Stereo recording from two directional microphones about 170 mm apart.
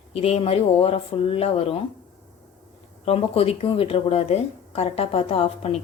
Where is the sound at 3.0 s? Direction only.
35° left (ahead or behind).